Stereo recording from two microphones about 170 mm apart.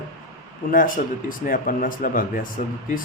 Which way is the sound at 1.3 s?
55° left (ahead or behind).